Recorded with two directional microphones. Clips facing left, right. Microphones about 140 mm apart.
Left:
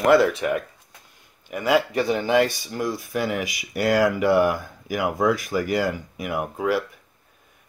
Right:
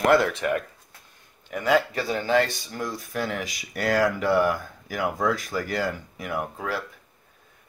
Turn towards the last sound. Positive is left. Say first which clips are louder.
# left 6 dB
turn(degrees=10)  # may be behind; listen again after turning